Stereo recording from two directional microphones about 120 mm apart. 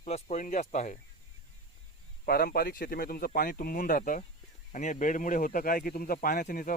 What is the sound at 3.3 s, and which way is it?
Speech, 90° left.